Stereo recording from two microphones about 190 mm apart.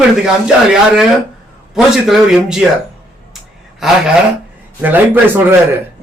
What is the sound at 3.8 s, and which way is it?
A man's voice, centre (ahead or behind).